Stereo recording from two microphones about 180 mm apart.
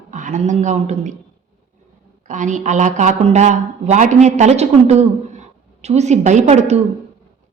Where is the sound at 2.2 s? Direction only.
45° right (ahead or behind).